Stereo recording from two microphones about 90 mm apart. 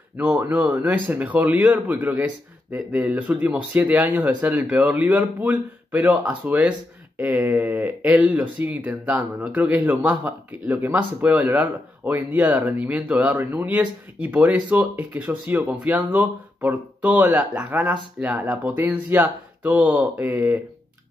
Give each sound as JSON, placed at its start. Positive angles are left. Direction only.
{"t": 0.2, "sound": "speech", "side_deg": -20}